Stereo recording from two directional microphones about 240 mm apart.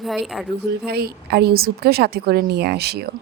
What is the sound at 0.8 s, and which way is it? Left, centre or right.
A woman's voice, right.